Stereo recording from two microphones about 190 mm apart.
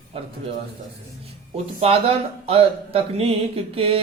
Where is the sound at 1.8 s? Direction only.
30° right (ahead or behind).